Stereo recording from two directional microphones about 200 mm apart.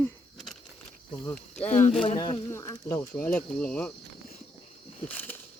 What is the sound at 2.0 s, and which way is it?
Speech, 25° left (ahead or behind).